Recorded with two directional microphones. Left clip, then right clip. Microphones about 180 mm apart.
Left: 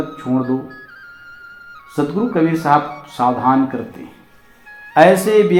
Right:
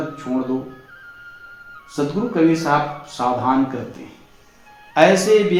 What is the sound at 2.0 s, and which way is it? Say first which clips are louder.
Speech: left 2 dB; 35° left (ahead or behind).